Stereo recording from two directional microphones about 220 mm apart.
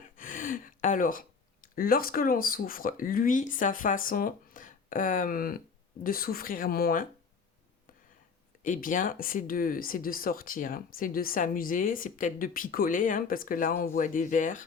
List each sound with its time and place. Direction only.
0.2 s a sound: 35° left (ahead or behind)
1.6 s speech: 40° left (ahead or behind)
8.6 s speech: 40° left (ahead or behind)